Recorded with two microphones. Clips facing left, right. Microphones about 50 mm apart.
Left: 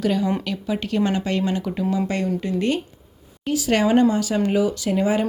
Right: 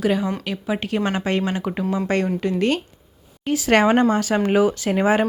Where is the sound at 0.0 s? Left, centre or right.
Right.